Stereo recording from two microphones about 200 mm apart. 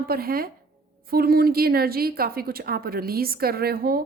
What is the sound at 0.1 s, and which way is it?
A woman's voice, 50° right (ahead or behind).